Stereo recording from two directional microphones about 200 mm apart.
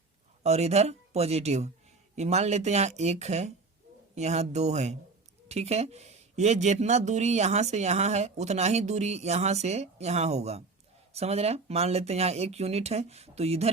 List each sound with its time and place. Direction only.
0.4 s speech: 35° right (ahead or behind)